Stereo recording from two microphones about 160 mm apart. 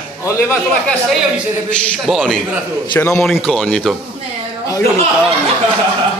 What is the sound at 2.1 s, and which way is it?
A man's voice, centre (ahead or behind).